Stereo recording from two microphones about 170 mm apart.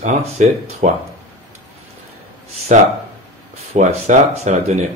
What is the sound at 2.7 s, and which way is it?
Speech, 45° right (ahead or behind).